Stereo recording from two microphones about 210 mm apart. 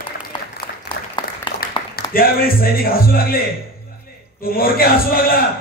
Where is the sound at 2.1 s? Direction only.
45° left (ahead or behind).